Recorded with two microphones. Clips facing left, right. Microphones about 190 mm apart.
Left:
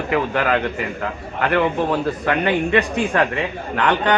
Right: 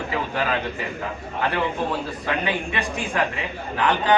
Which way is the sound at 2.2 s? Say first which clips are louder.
Left 6 dB; 60° left (ahead or behind).